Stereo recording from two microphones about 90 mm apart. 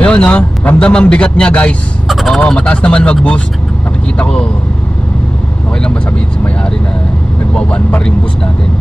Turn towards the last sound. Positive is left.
turn(degrees=10)  # may be behind; listen again after turning